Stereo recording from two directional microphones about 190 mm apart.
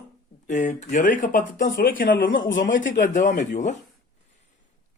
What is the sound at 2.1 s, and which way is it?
Speech, 75° left (ahead or behind).